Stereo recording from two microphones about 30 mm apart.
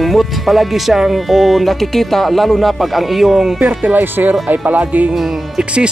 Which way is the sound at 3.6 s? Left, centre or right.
Right.